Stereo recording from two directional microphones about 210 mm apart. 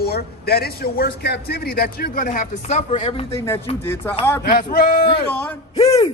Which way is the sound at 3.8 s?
10° left (ahead or behind).